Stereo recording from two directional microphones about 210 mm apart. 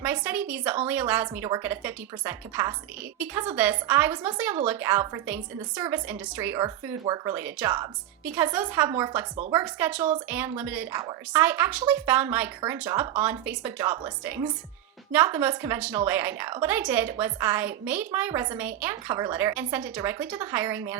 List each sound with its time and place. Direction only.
0.0 s speech: 10° right (ahead or behind)